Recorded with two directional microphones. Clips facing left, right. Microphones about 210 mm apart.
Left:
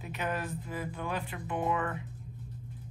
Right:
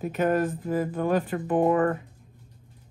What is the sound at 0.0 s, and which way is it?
Speech, 45° right (ahead or behind).